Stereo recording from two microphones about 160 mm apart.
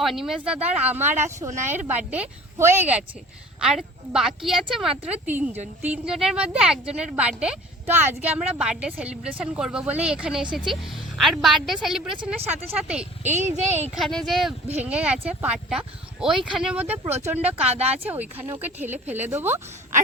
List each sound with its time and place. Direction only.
0.0 s a woman's voice: centre (ahead or behind)
13.2 s speech: 50° right (ahead or behind)
13.9 s a woman's voice: centre (ahead or behind)
17.7 s speech: 40° right (ahead or behind)
18.0 s speech: 10° right (ahead or behind)